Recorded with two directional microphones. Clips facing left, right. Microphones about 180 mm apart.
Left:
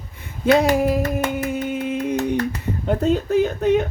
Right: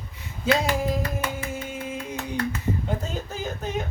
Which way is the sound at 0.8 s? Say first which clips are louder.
Left 7 dB; 65° left (ahead or behind).